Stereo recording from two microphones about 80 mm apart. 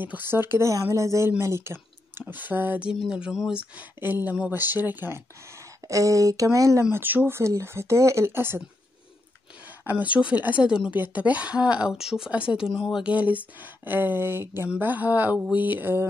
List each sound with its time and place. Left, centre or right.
0.0 s speech: right
0.8 s speech: right
3.1 s speech: centre
3.7 s speech: right
7.0 s speech: right
9.7 s a woman's voice: right; by 13.1 s centre
13.1 s speech: centre